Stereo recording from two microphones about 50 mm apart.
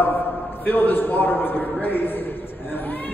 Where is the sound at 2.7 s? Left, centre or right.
Left.